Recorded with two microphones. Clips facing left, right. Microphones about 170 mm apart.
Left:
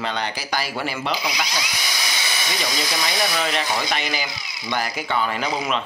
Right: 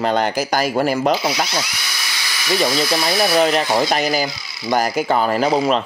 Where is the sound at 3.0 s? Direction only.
35° right (ahead or behind).